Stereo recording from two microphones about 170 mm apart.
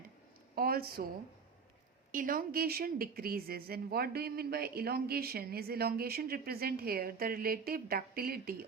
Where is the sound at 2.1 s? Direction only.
50° right (ahead or behind).